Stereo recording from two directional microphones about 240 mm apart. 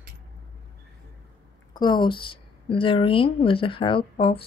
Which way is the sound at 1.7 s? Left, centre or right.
Centre.